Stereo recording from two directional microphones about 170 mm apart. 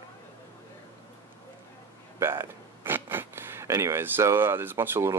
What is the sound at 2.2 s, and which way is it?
Speech, 15° right (ahead or behind).